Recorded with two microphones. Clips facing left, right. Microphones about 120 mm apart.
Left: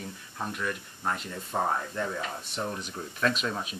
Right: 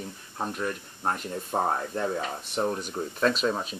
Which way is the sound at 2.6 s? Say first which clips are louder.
Right 7 dB; 40° right (ahead or behind).